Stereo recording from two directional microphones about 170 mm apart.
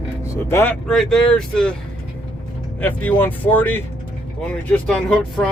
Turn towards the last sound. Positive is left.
turn(degrees=5)  # may be behind; listen again after turning